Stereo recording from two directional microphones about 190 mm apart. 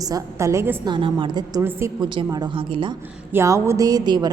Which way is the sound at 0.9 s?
25° right (ahead or behind).